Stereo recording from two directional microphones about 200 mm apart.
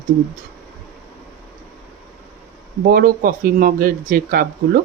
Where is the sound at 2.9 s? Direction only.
50° right (ahead or behind).